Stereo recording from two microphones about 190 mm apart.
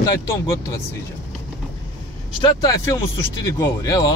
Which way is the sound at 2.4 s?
20° left (ahead or behind).